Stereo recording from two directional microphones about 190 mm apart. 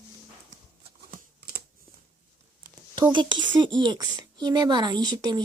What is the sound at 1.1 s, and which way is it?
Typing, 55° right (ahead or behind).